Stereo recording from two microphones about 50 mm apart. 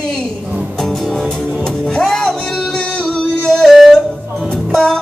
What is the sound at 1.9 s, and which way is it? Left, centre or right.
Music, centre.